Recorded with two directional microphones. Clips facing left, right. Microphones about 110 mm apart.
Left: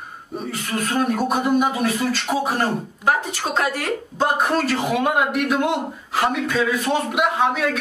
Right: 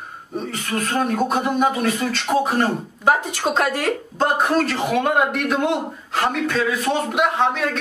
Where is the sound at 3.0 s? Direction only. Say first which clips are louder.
Right 3 dB; 20° right (ahead or behind).